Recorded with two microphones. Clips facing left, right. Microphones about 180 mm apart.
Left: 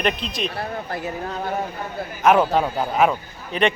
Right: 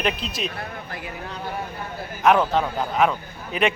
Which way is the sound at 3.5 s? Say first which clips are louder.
Left 2 dB; 5° right (ahead or behind).